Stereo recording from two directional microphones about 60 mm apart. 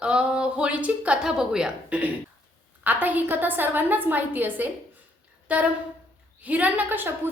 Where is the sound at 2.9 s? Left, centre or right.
Right.